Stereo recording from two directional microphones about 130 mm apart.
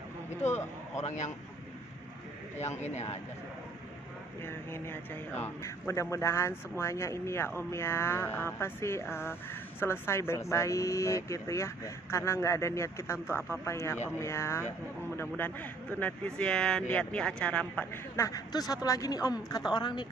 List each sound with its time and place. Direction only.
0.4 s a man's voice: 55° left (ahead or behind)
2.6 s a man's voice: 60° left (ahead or behind)
4.5 s speech: 20° left (ahead or behind)
18.2 s speech: 30° left (ahead or behind)